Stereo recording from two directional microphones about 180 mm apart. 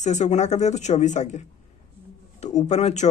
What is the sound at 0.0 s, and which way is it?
Speech, 40° left (ahead or behind).